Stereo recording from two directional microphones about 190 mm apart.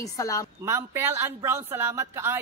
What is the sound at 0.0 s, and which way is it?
Speech, 15° left (ahead or behind).